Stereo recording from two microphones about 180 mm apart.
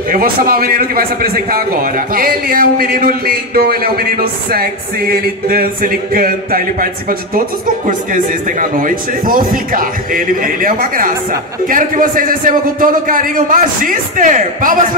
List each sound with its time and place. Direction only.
0.1 s a man's voice: 55° right (ahead or behind)
4.5 s a sound: 55° right (ahead or behind)
8.1 s a man's voice: 50° right (ahead or behind)